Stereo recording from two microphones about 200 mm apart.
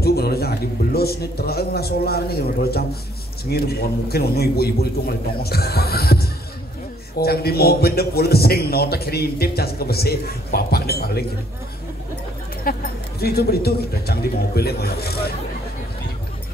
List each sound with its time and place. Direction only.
0.0 s a man's voice: 50° left (ahead or behind)
12.7 s a man's voice: 45° left (ahead or behind)